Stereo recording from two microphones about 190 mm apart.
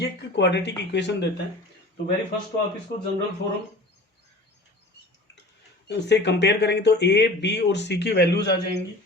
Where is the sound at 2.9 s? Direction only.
60° left (ahead or behind).